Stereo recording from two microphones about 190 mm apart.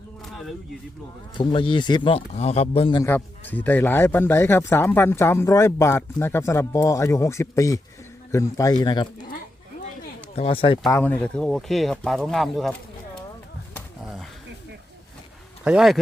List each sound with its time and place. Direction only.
0.3 s a sound: centre (ahead or behind)
1.4 s speech: 25° left (ahead or behind)
3.0 s a man's voice: 10° left (ahead or behind)
10.3 s speech: 30° left (ahead or behind)
10.9 s speech: 10° left (ahead or behind)
14.0 s a sound: centre (ahead or behind)
15.6 s speech: 5° right (ahead or behind)